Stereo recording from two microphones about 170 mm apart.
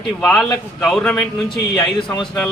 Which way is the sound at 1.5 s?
25° left (ahead or behind).